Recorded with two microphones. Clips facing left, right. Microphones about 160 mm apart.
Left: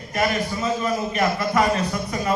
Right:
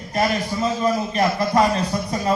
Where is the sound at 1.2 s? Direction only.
35° right (ahead or behind).